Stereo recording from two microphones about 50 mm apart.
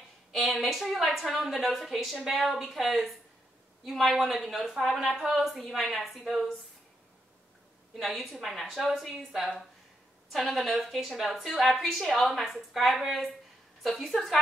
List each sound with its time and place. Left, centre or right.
0.3 s a woman's voice: centre
7.9 s a woman's voice: centre